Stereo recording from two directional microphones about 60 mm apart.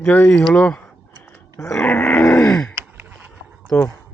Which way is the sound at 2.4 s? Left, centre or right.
Centre.